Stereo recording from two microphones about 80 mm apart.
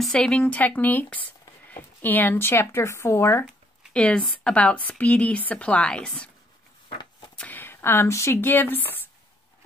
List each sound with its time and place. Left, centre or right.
0.0 s speech: centre; by 3.4 s left
3.9 s speech: centre
7.3 s speech: left